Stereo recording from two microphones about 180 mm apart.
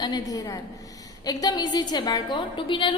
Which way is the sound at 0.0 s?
20° left (ahead or behind).